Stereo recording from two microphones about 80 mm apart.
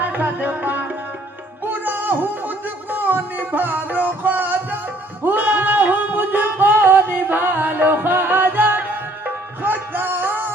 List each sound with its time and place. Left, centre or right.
0.0 s music: right